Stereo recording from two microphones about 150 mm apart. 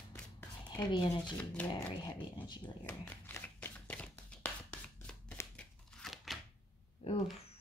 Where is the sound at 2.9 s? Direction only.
15° left (ahead or behind).